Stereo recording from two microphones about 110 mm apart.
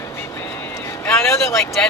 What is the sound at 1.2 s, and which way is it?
Speech, 25° left (ahead or behind).